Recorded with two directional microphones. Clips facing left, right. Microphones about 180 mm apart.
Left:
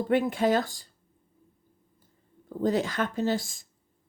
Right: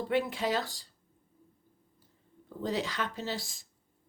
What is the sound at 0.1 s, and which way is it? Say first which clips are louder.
Speech: left 7 dB; 50° left (ahead or behind).